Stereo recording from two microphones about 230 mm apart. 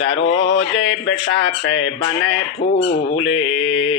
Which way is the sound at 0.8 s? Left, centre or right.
Left.